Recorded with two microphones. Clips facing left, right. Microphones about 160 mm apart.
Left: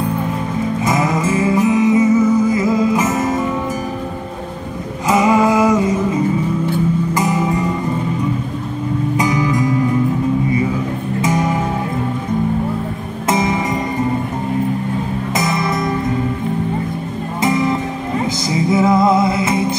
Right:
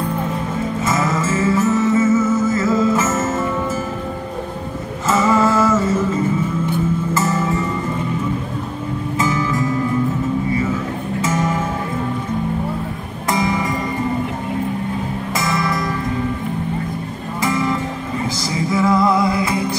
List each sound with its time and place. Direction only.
0.8 s music: 15° left (ahead or behind)
5.0 s music: 15° left (ahead or behind)
7.2 s music: 15° left (ahead or behind)
9.1 s music: 15° left (ahead or behind)
11.1 s music: 15° left (ahead or behind)
13.3 s music: 20° left (ahead or behind)
15.3 s music: 20° left (ahead or behind)
17.4 s music: 20° left (ahead or behind)